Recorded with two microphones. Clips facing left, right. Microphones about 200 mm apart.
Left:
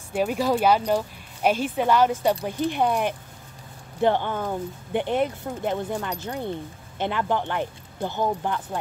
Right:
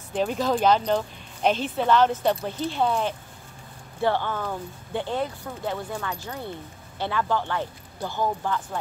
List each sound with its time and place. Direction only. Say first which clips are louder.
0.1 s speech: left 1 dB; 10° left (ahead or behind)